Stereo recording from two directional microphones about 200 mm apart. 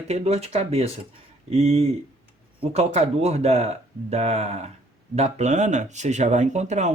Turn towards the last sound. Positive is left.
turn(degrees=-35)  # may be behind; listen again after turning